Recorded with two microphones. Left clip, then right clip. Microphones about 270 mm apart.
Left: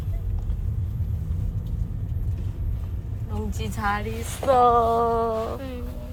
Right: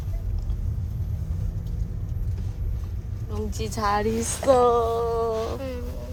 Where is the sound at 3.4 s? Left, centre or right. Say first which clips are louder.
Right 1 dB; centre.